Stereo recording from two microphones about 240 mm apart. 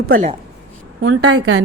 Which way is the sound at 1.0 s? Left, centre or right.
Right.